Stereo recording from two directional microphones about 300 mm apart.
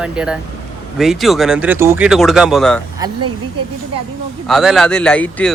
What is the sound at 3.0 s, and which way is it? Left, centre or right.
Speech, centre.